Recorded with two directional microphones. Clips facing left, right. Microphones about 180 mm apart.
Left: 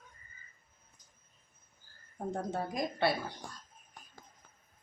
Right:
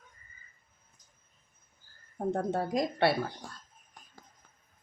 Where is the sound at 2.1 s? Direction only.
55° right (ahead or behind).